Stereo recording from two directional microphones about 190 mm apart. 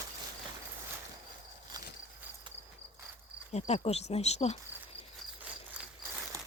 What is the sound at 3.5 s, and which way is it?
Cricket, 35° left (ahead or behind).